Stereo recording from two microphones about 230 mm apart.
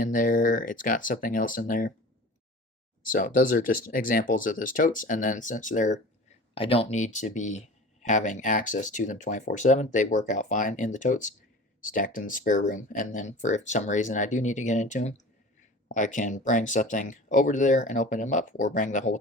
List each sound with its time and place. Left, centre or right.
0.0 s speech: left
3.0 s speech: left